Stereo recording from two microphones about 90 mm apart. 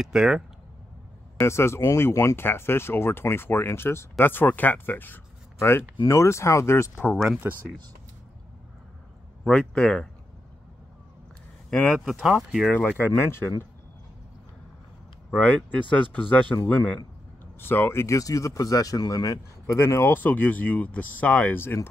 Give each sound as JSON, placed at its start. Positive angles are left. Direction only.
{"t": 0.0, "sound": "speech", "side_deg": -5}
{"t": 1.4, "sound": "speech", "side_deg": 30}
{"t": 7.3, "sound": "speech", "side_deg": -25}
{"t": 9.4, "sound": "speech", "side_deg": 15}
{"t": 11.9, "sound": "speech", "side_deg": 0}
{"t": 12.6, "sound": "speech", "side_deg": 15}
{"t": 13.0, "sound": "speech", "side_deg": 25}
{"t": 15.3, "sound": "speech", "side_deg": 15}
{"t": 19.6, "sound": "speech", "side_deg": 30}